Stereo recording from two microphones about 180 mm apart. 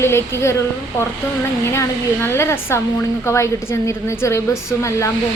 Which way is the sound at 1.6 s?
15° left (ahead or behind).